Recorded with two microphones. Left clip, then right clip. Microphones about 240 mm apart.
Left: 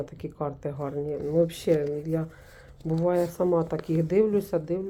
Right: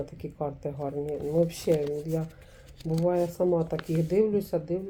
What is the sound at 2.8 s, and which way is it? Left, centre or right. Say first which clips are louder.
Speech: left 1 dB; left.